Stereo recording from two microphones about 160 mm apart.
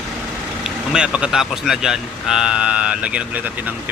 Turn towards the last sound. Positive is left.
turn(degrees=-10)  # may be behind; listen again after turning